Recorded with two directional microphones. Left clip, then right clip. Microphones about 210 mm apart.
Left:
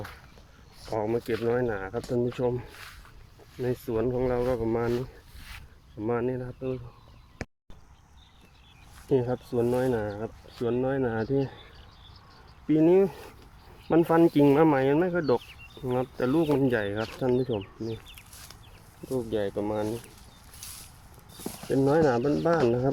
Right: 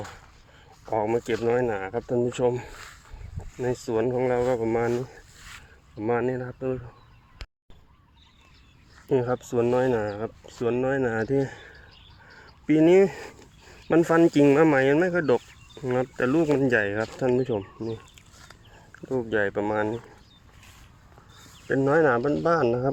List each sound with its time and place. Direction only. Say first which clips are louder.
0.9 s speech: right 4 dB; 5° right (ahead or behind)
2.7 s speech: right 2 dB; 45° right (ahead or behind)
3.8 s speech: right 3 dB; 10° right (ahead or behind)
4.9 s a sound: right 2 dB; 50° right (ahead or behind)
6.0 s speech: right 3 dB; 5° right (ahead or behind)
9.5 s speech: right 3 dB; 15° right (ahead or behind)
12.6 s speech: right 3 dB; 15° right (ahead or behind)
19.1 s speech: right 4 dB; 20° right (ahead or behind)
21.7 s speech: right 1 dB; 5° left (ahead or behind)
21.9 s speech: right 4 dB; 15° left (ahead or behind)